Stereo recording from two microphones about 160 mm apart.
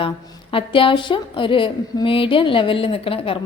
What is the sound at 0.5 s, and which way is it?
A woman's voice, 35° left (ahead or behind).